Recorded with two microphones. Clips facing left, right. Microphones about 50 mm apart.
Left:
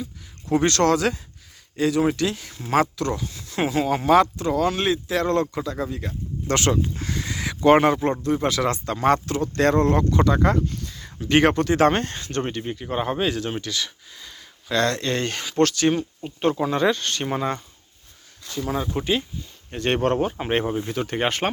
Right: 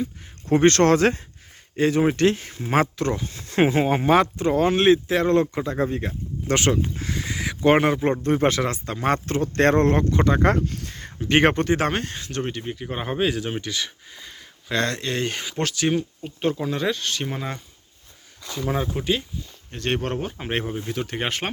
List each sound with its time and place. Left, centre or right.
0.0 s speech: right
6.1 s speech: centre
8.2 s speech: right
8.6 s speech: centre
9.2 s speech: right
10.0 s speech: right
10.4 s speech: right
11.2 s speech: centre
11.8 s speech: centre
15.0 s speech: centre
18.9 s speech: centre